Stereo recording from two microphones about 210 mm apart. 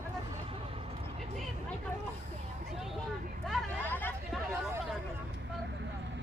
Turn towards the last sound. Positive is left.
turn(degrees=10)  # may be behind; listen again after turning